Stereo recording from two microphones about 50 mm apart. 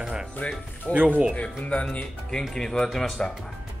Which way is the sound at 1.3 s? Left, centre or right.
Left.